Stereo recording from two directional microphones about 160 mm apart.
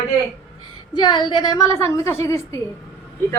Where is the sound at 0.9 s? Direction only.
25° left (ahead or behind).